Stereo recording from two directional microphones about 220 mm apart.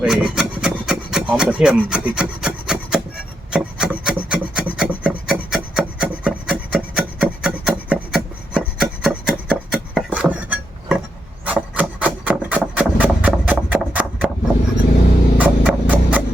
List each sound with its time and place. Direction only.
0.0 s rub: 5° right (ahead or behind)
11.4 s wood: 5° right (ahead or behind)
15.4 s music: 5° right (ahead or behind)